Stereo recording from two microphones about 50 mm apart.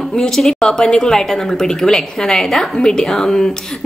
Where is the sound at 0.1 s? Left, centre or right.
Centre.